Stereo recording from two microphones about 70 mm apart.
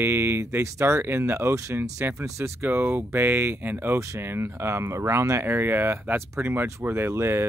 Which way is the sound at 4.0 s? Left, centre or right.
Right.